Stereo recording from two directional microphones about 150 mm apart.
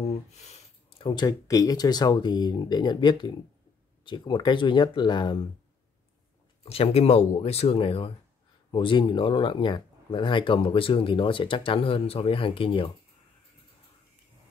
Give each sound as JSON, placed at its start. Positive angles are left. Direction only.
{"t": 0.5, "sound": "speech", "side_deg": 35}
{"t": 6.6, "sound": "speech", "side_deg": 40}